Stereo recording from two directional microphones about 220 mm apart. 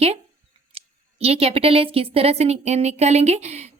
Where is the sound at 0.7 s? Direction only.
25° right (ahead or behind).